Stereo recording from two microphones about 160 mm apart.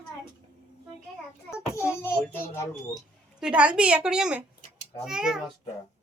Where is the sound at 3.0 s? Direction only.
5° right (ahead or behind).